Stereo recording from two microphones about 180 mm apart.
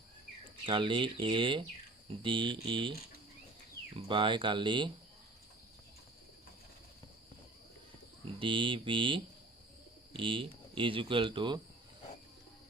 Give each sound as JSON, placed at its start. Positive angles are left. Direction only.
{"t": 0.6, "sound": "speech", "side_deg": -25}
{"t": 4.1, "sound": "speech", "side_deg": -25}
{"t": 8.2, "sound": "speech", "side_deg": -30}